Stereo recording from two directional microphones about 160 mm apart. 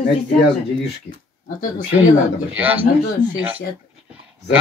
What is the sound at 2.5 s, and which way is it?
A man's voice, 10° right (ahead or behind).